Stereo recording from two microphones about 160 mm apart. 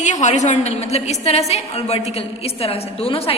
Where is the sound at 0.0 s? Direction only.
45° left (ahead or behind).